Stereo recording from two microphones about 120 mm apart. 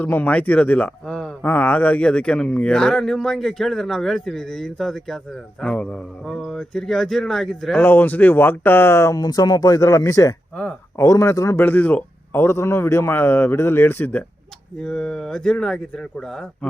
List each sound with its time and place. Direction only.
0.0 s speech: 15° left (ahead or behind)
7.9 s a man's voice: 15° left (ahead or behind)
11.6 s a man's voice: 15° left (ahead or behind)